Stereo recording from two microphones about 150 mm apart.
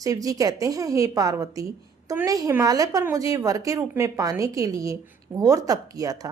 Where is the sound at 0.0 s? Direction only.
25° right (ahead or behind).